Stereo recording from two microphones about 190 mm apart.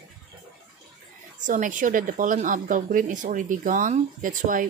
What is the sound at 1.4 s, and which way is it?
A woman's voice, 40° right (ahead or behind).